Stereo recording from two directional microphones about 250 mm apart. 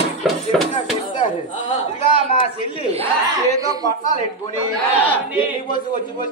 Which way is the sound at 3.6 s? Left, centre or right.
Centre.